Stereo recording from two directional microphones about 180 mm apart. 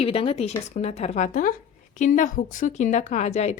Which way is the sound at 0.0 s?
30° left (ahead or behind).